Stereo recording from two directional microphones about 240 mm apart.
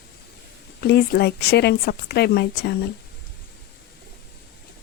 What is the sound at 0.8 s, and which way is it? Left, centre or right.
Speech, left.